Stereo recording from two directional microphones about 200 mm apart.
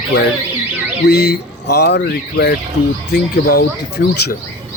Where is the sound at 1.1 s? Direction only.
55° left (ahead or behind).